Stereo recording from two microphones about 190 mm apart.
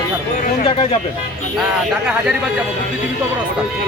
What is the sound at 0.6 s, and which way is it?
Speech, 30° left (ahead or behind).